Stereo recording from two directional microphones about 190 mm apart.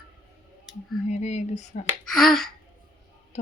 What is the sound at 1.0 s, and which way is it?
Speech, 35° left (ahead or behind).